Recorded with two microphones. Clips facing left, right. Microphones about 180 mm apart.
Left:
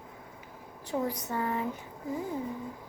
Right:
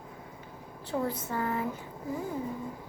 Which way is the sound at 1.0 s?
15° left (ahead or behind).